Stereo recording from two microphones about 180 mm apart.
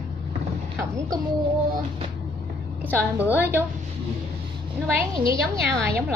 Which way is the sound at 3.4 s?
10° right (ahead or behind).